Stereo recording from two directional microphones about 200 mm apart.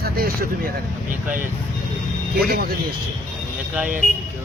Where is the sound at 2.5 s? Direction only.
50° right (ahead or behind).